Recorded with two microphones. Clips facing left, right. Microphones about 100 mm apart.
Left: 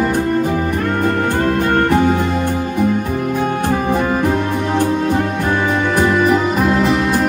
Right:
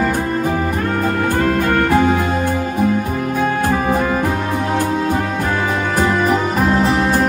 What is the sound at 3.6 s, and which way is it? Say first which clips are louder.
Music: even; 45° right (ahead or behind).